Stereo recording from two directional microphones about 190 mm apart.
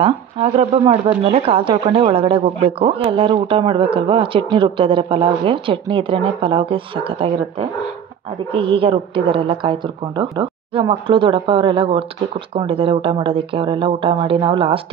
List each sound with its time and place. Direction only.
0.0 s speech: 30° right (ahead or behind)